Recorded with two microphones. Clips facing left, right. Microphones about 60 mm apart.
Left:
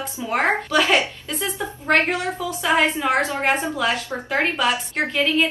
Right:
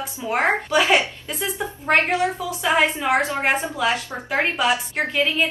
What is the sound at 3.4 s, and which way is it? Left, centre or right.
Speech, centre.